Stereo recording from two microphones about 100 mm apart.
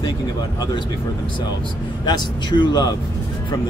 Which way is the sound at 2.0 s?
50° left (ahead or behind).